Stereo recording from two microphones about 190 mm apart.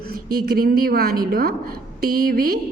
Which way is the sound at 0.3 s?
50° right (ahead or behind).